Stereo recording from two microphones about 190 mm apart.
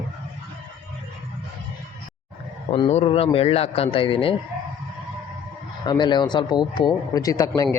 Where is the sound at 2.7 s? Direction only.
30° left (ahead or behind).